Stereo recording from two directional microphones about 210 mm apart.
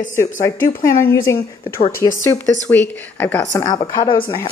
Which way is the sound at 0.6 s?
40° left (ahead or behind).